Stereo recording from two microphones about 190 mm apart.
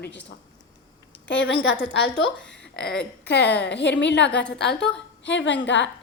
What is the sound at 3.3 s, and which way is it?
A woman's voice, 65° left (ahead or behind).